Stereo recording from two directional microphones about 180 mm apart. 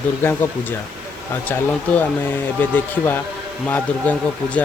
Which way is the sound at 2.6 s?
10° left (ahead or behind).